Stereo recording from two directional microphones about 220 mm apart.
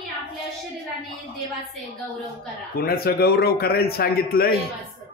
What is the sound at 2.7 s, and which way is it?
A man's voice, 40° left (ahead or behind).